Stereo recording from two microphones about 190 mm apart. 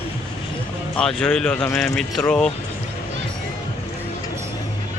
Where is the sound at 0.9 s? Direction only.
5° left (ahead or behind).